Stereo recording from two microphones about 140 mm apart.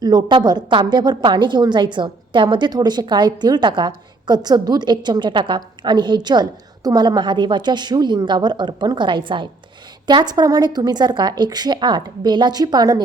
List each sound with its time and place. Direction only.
0.0 s a woman's voice: 30° right (ahead or behind)